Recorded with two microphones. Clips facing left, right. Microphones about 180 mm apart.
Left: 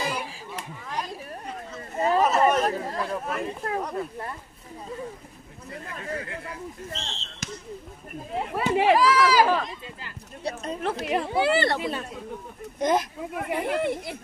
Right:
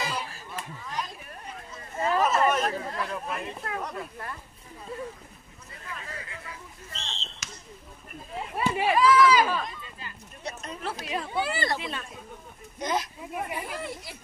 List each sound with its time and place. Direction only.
0.1 s a sound: 10° left (ahead or behind)
2.0 s chatter: 35° left (ahead or behind)
2.4 s speech: 35° left (ahead or behind)
5.9 s speech: 55° left (ahead or behind); by 9.7 s 85° left
10.4 s speech: 35° left (ahead or behind)
10.8 s speech: 60° left (ahead or behind)
11.8 s speech: 45° left (ahead or behind)
13.5 s speech: 65° left (ahead or behind)